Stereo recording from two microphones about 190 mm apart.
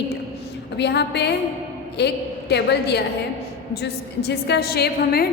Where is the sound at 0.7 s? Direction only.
60° left (ahead or behind).